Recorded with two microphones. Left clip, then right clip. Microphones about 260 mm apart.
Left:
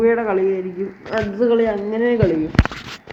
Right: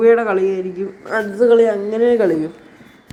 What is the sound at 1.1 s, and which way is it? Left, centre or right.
A man's voice, centre.